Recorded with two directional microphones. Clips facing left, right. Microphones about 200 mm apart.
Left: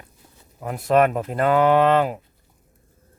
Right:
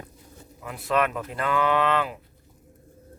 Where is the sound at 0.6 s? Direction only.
45° left (ahead or behind).